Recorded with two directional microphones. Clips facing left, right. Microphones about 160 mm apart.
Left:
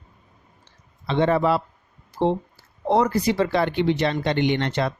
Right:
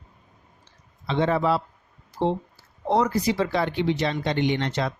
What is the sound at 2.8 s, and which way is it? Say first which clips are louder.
Speech: left 2 dB; 60° left (ahead or behind).